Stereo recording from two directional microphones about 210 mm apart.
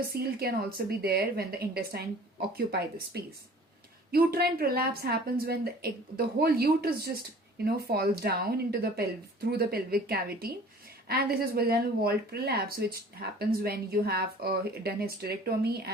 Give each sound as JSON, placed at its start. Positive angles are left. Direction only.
{"t": 0.1, "sound": "speech", "side_deg": -45}
{"t": 4.1, "sound": "speech", "side_deg": -45}